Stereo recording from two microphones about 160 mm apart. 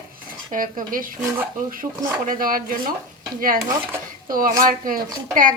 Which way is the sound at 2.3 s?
60° right (ahead or behind).